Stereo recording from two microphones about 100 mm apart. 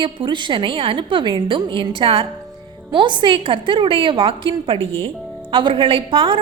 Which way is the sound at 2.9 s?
50° right (ahead or behind).